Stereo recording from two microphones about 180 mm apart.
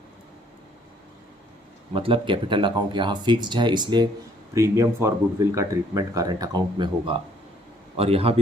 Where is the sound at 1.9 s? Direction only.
30° right (ahead or behind).